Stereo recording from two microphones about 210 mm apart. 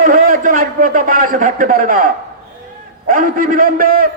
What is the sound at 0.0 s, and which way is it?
A man's voice, 40° right (ahead or behind).